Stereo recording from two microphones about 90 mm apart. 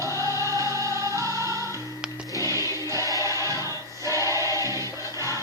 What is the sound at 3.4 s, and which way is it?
Choir, 35° right (ahead or behind).